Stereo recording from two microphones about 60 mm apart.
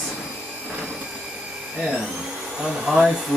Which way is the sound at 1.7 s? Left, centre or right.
Centre.